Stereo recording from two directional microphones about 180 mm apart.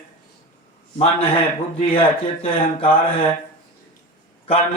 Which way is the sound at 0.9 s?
30° left (ahead or behind).